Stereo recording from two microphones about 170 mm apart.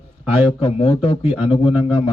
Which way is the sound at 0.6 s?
35° left (ahead or behind).